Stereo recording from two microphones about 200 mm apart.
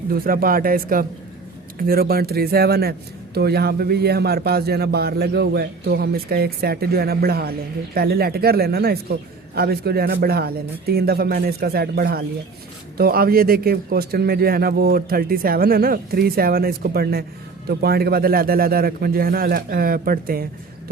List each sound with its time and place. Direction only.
0.1 s a man's voice: 45° right (ahead or behind)